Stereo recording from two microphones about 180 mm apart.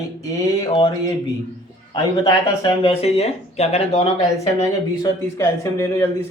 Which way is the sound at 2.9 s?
35° left (ahead or behind).